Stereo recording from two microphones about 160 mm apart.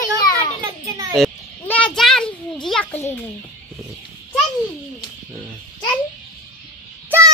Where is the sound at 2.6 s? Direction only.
5° left (ahead or behind).